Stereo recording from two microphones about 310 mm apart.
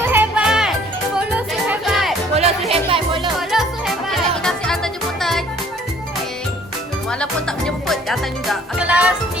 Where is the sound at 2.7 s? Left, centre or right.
Centre.